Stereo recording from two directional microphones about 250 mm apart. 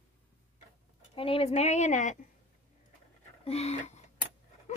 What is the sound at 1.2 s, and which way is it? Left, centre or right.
Speech, left.